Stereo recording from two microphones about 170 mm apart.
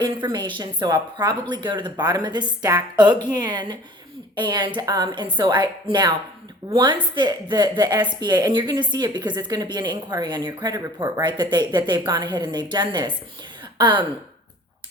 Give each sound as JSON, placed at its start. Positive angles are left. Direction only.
{"t": 0.0, "sound": "a woman's voice", "side_deg": -25}